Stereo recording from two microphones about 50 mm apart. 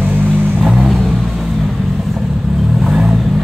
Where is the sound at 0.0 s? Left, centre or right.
Right.